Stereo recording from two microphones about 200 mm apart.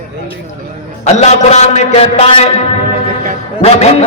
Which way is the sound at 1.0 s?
35° left (ahead or behind).